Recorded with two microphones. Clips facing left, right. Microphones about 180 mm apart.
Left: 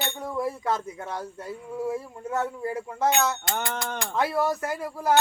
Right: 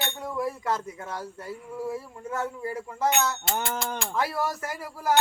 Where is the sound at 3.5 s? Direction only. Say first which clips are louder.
Even; 5° right (ahead or behind).